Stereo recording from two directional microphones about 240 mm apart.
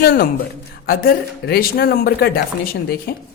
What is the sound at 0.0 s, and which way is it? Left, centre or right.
A man's voice, left.